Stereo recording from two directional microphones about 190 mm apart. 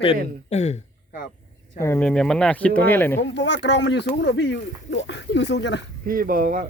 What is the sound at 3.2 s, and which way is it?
Speech, 70° left (ahead or behind).